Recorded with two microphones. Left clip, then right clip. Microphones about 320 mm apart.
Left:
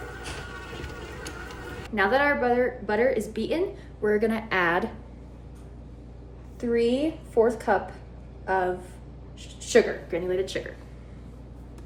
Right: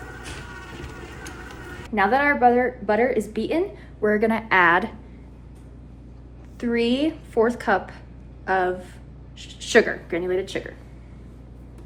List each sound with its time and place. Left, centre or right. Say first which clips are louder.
2.0 s a woman's voice: right 4 dB; centre
6.6 s a woman's voice: right 1 dB; right